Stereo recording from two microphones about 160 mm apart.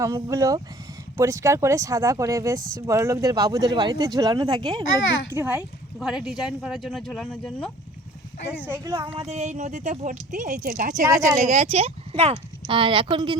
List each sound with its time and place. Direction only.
0.0 s speech: 20° right (ahead or behind)
5.3 s a child's voice: 10° right (ahead or behind); by 7.7 s 5° left (ahead or behind)
8.6 s speech: 15° right (ahead or behind)
9.1 s speech: 40° right (ahead or behind); by 11.0 s 60° right (ahead or behind)
11.3 s speech: 45° right (ahead or behind)